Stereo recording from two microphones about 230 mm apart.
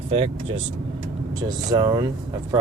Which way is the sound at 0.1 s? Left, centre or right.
Right.